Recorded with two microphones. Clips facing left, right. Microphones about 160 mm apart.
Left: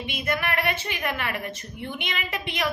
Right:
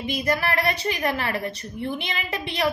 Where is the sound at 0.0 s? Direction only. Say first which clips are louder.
Right 4 dB; 40° right (ahead or behind).